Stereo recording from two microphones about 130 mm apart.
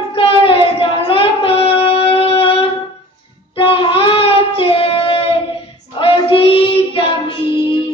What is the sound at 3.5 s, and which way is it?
Child singing, 45° left (ahead or behind).